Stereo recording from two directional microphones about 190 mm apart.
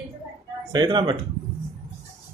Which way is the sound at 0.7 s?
20° right (ahead or behind).